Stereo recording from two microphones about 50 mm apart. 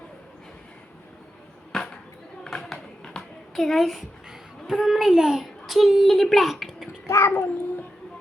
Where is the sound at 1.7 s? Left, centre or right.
Centre.